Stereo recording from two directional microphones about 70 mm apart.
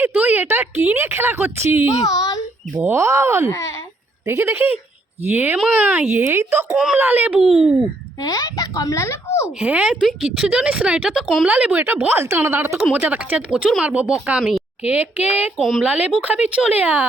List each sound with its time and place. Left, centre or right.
0.0 s a woman's voice: right
2.0 s a woman's voice: left
2.9 s a woman's voice: right
6.9 s speech: right
7.5 s a woman's voice: centre
8.2 s a woman's voice: left
9.0 s speech: left
9.6 s a woman's voice: centre; by 12.8 s right
12.9 s a woman's voice: right
15.5 s a woman's voice: centre
15.8 s speech: right